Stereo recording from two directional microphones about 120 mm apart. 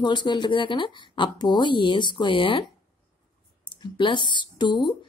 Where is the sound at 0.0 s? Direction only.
40° left (ahead or behind).